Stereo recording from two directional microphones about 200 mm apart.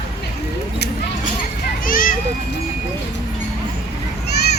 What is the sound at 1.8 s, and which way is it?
Children playing, 45° left (ahead or behind).